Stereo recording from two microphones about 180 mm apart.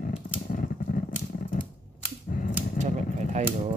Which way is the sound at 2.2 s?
45° left (ahead or behind).